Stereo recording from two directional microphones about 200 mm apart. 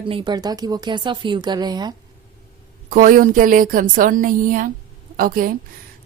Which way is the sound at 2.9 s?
40° right (ahead or behind).